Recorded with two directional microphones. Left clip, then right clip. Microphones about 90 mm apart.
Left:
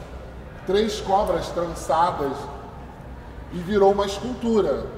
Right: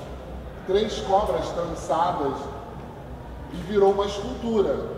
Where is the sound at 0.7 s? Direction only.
30° left (ahead or behind).